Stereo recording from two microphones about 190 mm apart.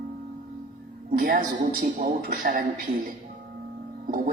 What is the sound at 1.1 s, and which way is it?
Speech, 50° right (ahead or behind).